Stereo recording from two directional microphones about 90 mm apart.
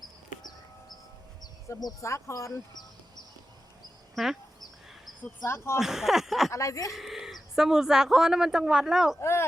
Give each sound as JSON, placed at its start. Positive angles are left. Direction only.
{"t": 2.0, "sound": "speech", "side_deg": 35}
{"t": 4.1, "sound": "speech", "side_deg": 0}
{"t": 5.5, "sound": "speech", "side_deg": 30}
{"t": 5.8, "sound": "speech", "side_deg": -5}
{"t": 6.5, "sound": "speech", "side_deg": 35}
{"t": 6.9, "sound": "speech", "side_deg": -5}